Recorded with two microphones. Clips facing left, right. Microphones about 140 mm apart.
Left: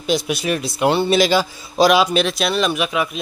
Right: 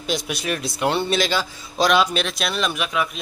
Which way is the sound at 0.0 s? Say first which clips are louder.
Left 6 dB; centre (ahead or behind).